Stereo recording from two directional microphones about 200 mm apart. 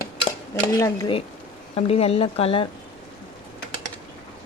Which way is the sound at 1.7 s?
30° left (ahead or behind).